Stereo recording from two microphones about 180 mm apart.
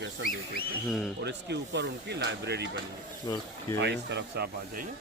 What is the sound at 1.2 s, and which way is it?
Speech, 70° right (ahead or behind).